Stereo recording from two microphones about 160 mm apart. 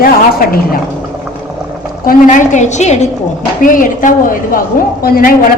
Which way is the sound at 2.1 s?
50° left (ahead or behind).